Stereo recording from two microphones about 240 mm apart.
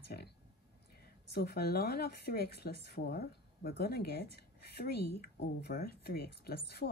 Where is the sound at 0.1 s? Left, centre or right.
Left.